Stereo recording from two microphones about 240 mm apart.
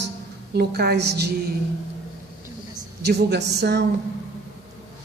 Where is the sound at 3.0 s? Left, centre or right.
Right.